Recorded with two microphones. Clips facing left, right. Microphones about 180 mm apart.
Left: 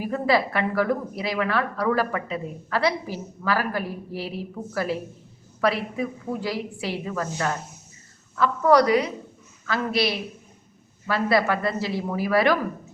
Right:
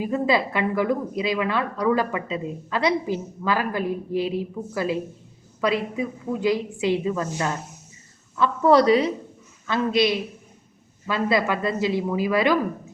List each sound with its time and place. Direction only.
0.0 s a woman's voice: 20° right (ahead or behind)